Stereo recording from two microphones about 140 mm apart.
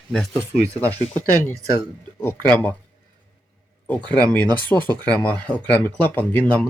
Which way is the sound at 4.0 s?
30° right (ahead or behind).